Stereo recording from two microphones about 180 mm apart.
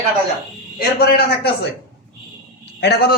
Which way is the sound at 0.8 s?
60° left (ahead or behind).